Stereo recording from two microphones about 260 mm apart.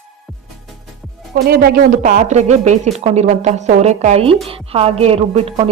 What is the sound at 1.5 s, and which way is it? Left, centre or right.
A woman's voice, right.